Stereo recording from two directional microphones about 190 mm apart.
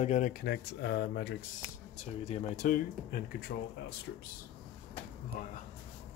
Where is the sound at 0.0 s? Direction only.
40° left (ahead or behind); by 1.4 s 60° left (ahead or behind).